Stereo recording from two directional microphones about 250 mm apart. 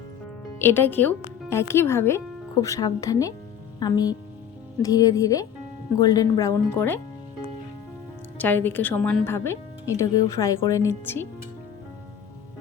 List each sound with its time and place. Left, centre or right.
0.6 s speech: centre
8.4 s speech: centre